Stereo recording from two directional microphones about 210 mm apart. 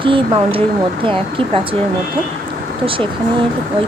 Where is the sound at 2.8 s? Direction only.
25° right (ahead or behind).